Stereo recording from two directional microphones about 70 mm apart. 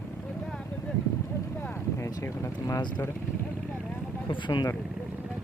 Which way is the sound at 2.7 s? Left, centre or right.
Left.